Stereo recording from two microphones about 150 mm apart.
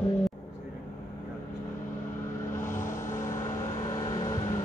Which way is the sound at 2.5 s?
15° left (ahead or behind).